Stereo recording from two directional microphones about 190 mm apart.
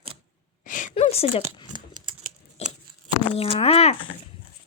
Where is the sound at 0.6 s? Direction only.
45° left (ahead or behind).